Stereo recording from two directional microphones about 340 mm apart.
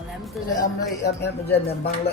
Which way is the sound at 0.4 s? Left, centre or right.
Centre.